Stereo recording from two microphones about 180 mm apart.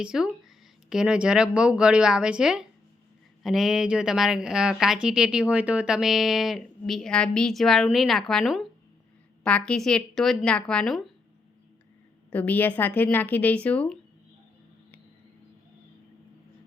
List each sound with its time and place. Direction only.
0.0 s a woman's voice: 5° right (ahead or behind)
12.3 s a woman's voice: 10° left (ahead or behind)